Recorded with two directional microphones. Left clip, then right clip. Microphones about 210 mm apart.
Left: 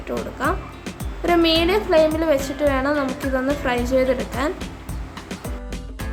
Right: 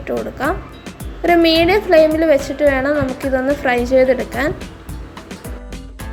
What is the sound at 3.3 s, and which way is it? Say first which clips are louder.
Speech: right 7 dB; 15° right (ahead or behind).